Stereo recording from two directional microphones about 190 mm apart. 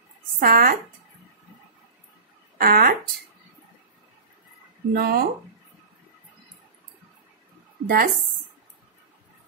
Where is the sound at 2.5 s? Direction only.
50° right (ahead or behind).